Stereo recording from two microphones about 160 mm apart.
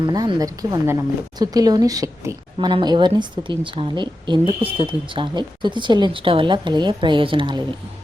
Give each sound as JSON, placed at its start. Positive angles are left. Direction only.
{"t": 0.0, "sound": "speech", "side_deg": -25}